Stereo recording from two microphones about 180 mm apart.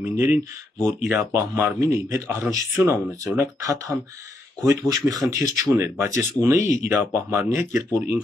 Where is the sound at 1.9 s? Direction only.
15° right (ahead or behind).